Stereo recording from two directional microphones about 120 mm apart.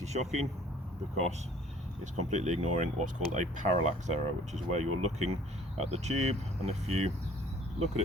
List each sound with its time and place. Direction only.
0.0 s speech: 70° right (ahead or behind)
2.1 s speech: 70° right (ahead or behind)